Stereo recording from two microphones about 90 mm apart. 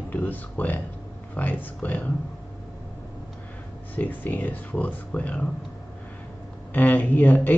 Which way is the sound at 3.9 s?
20° left (ahead or behind).